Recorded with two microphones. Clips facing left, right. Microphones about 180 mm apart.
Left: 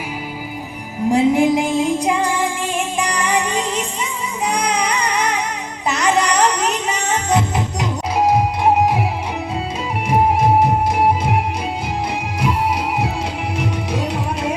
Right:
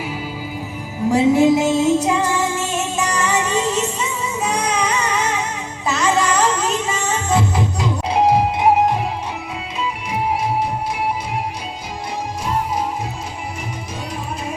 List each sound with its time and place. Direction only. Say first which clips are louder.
1.1 s music: right 1 dB; 15° left (ahead or behind)
8.1 s music: right 1 dB; 30° right (ahead or behind)
10.1 s music: left 7 dB; 50° left (ahead or behind)
12.4 s music: left 3 dB; 70° left (ahead or behind)